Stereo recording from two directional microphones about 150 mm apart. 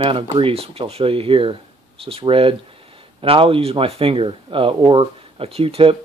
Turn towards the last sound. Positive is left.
turn(degrees=-40)  # may be behind; listen again after turning